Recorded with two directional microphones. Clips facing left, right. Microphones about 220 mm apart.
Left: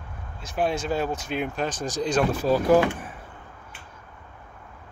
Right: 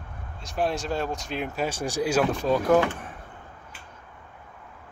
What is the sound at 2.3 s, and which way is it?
Speech, 5° left (ahead or behind).